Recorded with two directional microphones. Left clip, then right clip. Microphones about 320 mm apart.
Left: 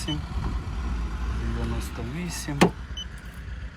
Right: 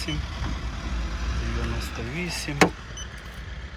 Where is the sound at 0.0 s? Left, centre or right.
Centre.